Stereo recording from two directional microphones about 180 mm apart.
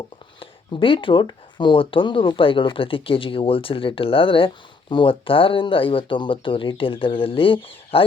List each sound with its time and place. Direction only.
0.3 s speech: 30° left (ahead or behind)